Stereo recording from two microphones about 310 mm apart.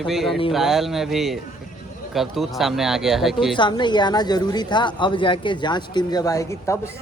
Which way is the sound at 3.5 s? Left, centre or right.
Centre.